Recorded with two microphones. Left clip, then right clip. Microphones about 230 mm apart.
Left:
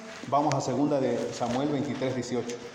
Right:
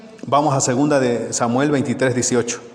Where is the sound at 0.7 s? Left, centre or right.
Right.